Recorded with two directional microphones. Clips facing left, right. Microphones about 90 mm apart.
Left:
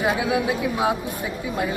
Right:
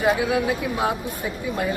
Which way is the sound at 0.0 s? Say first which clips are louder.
Right 1 dB; 10° left (ahead or behind).